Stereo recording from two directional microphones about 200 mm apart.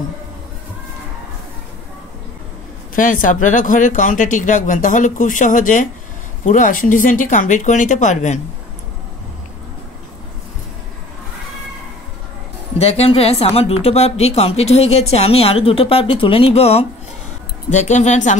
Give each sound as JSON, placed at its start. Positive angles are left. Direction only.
{"t": 3.0, "sound": "speech", "side_deg": 40}
{"t": 12.7, "sound": "a woman's voice", "side_deg": 30}